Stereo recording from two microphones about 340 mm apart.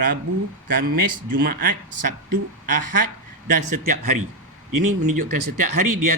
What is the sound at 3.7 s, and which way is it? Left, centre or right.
A man's voice, right.